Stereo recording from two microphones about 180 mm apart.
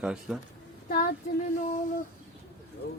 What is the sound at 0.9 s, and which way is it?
Speech, 55° left (ahead or behind).